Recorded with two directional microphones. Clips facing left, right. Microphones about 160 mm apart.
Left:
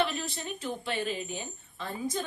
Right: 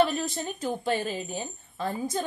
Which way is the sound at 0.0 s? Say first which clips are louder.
Right 6 dB; 40° right (ahead or behind).